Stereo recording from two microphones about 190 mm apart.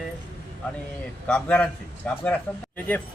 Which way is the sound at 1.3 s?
10° left (ahead or behind).